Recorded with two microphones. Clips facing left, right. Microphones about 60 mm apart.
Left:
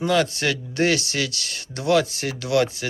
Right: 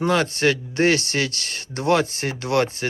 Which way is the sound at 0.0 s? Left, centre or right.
Right.